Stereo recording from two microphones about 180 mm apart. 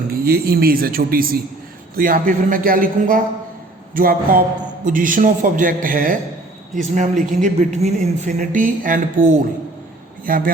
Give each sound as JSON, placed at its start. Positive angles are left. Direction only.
{"t": 0.1, "sound": "speech", "side_deg": -60}